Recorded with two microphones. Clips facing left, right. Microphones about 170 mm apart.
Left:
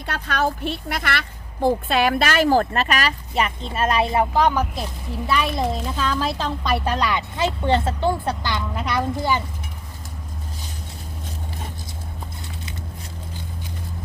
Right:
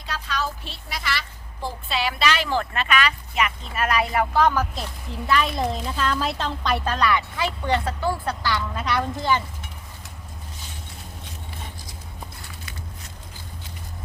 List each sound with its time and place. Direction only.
0.0 s speech: 60° left (ahead or behind); by 9.4 s 10° left (ahead or behind)